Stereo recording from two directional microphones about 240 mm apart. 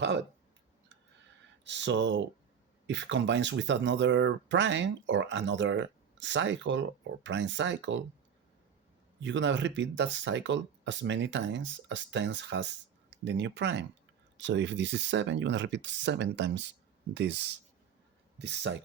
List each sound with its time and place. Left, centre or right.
1.6 s speech: right
9.2 s speech: right